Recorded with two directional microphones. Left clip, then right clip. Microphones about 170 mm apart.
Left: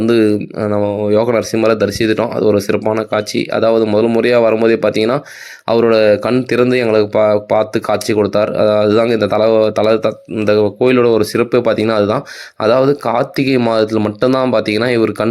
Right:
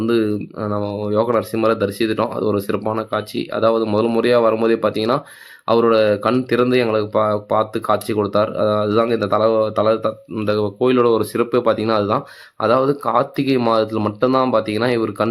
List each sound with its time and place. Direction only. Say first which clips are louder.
0.0 s speech: left 6 dB; 20° left (ahead or behind)